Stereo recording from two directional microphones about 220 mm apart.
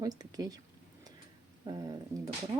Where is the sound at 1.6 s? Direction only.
20° right (ahead or behind).